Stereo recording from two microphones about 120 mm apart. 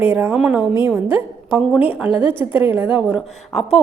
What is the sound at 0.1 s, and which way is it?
A woman's voice, 15° right (ahead or behind).